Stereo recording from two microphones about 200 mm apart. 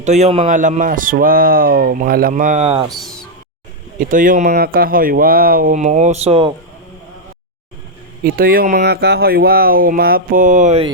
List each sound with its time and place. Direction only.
0.0 s speech: 35° right (ahead or behind)
2.9 s a sound: centre (ahead or behind)
4.1 s speech: 40° right (ahead or behind)
8.2 s speech: 45° right (ahead or behind)